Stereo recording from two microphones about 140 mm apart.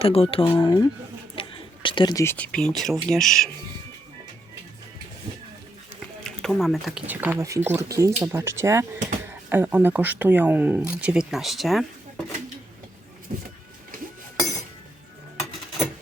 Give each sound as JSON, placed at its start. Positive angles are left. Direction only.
{"t": 0.0, "sound": "speech", "side_deg": 40}
{"t": 1.4, "sound": "a sound", "side_deg": 35}
{"t": 2.1, "sound": "speech", "side_deg": 15}
{"t": 6.2, "sound": "speech", "side_deg": 5}
{"t": 7.1, "sound": "speech", "side_deg": -15}
{"t": 13.3, "sound": "vehicle", "side_deg": -60}